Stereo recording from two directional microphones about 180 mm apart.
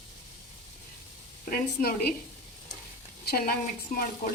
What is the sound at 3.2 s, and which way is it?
Speech, 60° left (ahead or behind).